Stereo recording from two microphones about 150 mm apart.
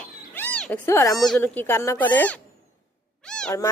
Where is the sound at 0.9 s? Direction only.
20° left (ahead or behind).